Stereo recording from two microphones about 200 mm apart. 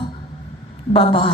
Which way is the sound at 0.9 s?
25° left (ahead or behind).